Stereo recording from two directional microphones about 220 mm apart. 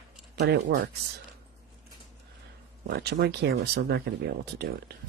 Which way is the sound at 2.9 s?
45° right (ahead or behind).